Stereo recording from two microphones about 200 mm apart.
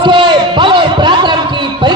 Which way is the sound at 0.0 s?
25° right (ahead or behind).